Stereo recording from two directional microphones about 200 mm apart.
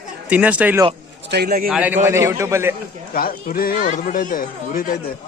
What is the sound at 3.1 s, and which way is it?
Speech, 45° left (ahead or behind).